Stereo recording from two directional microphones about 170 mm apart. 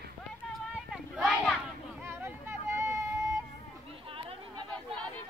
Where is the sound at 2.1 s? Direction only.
15° right (ahead or behind).